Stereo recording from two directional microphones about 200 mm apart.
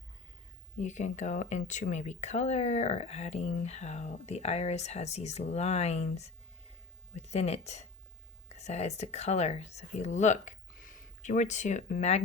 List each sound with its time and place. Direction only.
0.8 s speech: 35° left (ahead or behind)